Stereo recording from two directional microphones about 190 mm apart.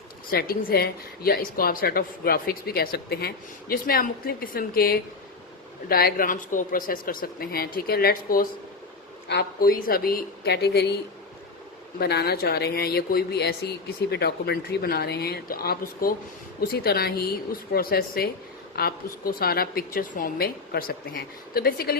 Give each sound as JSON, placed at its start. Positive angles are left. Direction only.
{"t": 0.3, "sound": "a woman's voice", "side_deg": 50}
{"t": 11.9, "sound": "a woman's voice", "side_deg": 60}